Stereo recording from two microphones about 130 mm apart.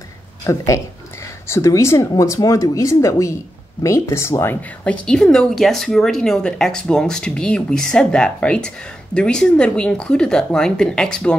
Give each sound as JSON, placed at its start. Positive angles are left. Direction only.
{"t": 0.5, "sound": "speech", "side_deg": 25}
{"t": 5.0, "sound": "a woman's voice", "side_deg": 5}